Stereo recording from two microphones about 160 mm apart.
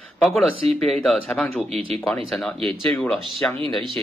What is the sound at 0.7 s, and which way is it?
Speech, centre (ahead or behind).